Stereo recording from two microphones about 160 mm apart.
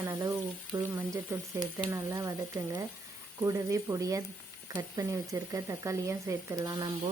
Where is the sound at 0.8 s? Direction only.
15° right (ahead or behind).